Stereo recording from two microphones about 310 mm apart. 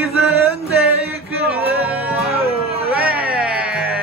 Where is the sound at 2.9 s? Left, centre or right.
Centre.